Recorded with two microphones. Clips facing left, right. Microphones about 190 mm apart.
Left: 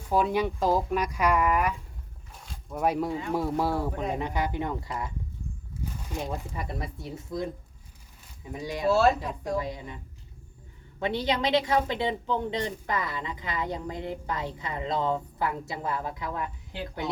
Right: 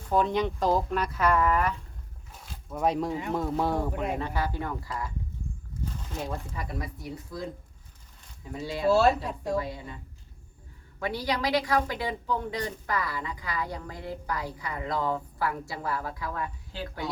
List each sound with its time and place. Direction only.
0.1 s speech: 10° left (ahead or behind)
2.5 s a woman's voice: centre (ahead or behind); by 5.1 s 20° left (ahead or behind)
5.8 s a woman's voice: 10° left (ahead or behind)
8.5 s speech: 15° left (ahead or behind)
8.9 s speech: centre (ahead or behind)
9.6 s speech: 20° left (ahead or behind)
11.0 s a woman's voice: 25° left (ahead or behind)